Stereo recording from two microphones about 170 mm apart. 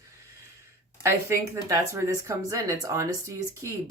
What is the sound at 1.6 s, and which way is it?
Speech, 20° right (ahead or behind).